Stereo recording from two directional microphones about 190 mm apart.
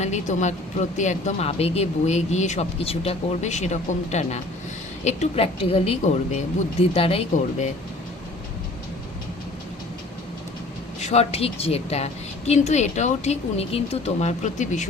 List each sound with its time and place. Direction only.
0.0 s a woman's voice: 40° left (ahead or behind)
11.0 s a woman's voice: 35° left (ahead or behind)